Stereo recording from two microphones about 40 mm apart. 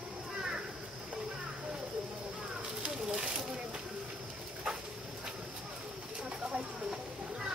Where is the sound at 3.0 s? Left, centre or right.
Centre.